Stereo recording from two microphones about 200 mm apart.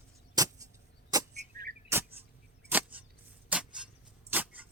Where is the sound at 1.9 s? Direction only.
10° right (ahead or behind).